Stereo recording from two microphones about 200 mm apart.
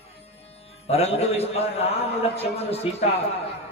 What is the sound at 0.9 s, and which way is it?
A man's voice, 30° left (ahead or behind).